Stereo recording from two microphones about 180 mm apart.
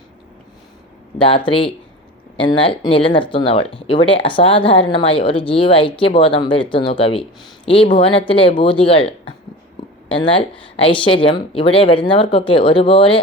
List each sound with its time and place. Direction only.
1.5 s a woman's voice: 30° left (ahead or behind)